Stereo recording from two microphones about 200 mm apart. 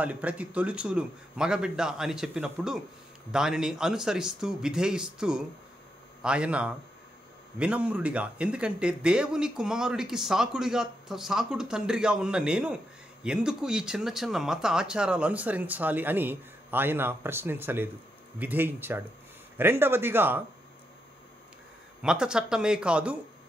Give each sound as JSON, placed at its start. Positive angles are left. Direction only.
{"t": 0.0, "sound": "a man's voice", "side_deg": -5}
{"t": 22.0, "sound": "a man's voice", "side_deg": -5}